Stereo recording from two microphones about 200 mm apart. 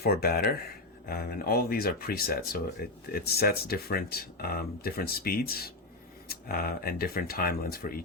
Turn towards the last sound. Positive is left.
turn(degrees=45)  # may be behind; listen again after turning